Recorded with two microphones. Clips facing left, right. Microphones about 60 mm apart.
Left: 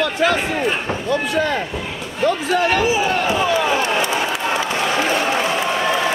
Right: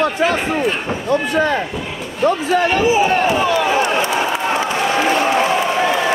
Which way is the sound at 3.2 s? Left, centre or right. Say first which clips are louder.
Right 2 dB; right.